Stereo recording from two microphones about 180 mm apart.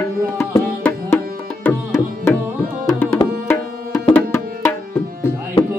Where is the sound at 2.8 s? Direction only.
20° left (ahead or behind).